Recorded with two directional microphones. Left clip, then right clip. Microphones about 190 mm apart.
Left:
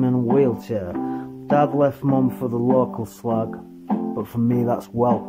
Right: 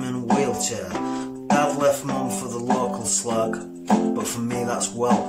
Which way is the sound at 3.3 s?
40° left (ahead or behind).